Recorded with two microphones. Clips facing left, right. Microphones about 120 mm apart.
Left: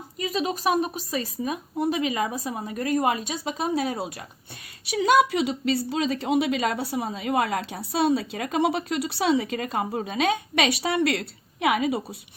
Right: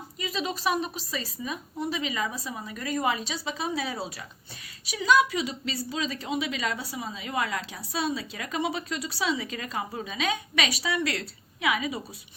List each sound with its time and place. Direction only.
0.2 s speech: 45° left (ahead or behind)
4.9 s a woman's voice: 60° left (ahead or behind)